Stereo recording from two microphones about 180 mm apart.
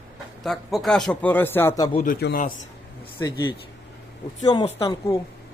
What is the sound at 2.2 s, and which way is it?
Speech, 55° left (ahead or behind).